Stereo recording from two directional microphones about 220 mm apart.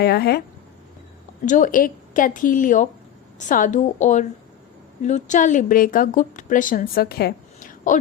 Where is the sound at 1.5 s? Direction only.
35° left (ahead or behind).